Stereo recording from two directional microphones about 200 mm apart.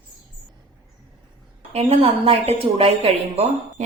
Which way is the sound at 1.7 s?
30° right (ahead or behind).